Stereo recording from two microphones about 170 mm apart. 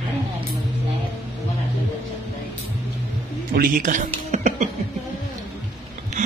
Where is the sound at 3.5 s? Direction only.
55° right (ahead or behind).